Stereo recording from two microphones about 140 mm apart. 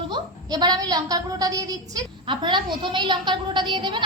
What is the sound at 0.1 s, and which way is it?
A woman's voice, 30° right (ahead or behind).